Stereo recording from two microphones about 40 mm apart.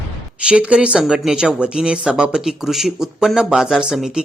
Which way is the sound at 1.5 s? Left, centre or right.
Right.